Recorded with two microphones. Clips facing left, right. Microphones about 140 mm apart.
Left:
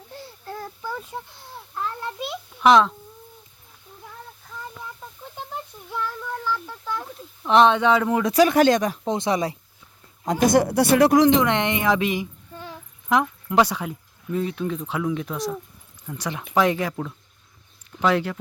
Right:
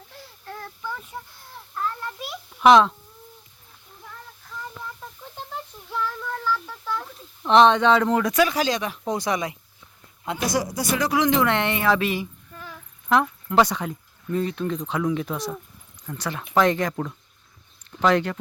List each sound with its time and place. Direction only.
0.2 s a sound: 35° left (ahead or behind)
2.6 s speech: centre (ahead or behind)
5.5 s a sound: 10° left (ahead or behind)
8.4 s speech: 50° left (ahead or behind)
9.0 s speech: 25° left (ahead or behind)
10.2 s speech: 50° left (ahead or behind)
11.3 s a woman's voice: 20° left (ahead or behind)
12.5 s child singing: 30° left (ahead or behind)
13.1 s speech: 15° left (ahead or behind)
16.0 s a woman's voice: 10° left (ahead or behind)
16.9 s speech: 10° right (ahead or behind)
18.0 s a woman's voice: 5° left (ahead or behind)